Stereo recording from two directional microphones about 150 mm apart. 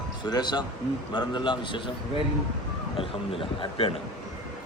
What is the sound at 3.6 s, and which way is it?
Speech, 40° left (ahead or behind).